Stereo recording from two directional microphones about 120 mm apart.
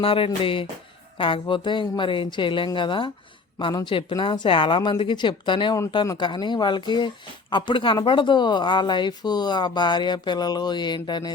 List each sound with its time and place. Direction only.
0.0 s speech: 50° left (ahead or behind)